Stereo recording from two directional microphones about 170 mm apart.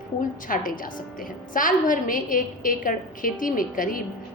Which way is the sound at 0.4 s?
55° left (ahead or behind).